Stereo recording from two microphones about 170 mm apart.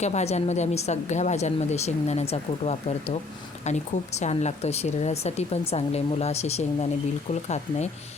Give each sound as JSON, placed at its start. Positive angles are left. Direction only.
{"t": 0.0, "sound": "speech", "side_deg": 40}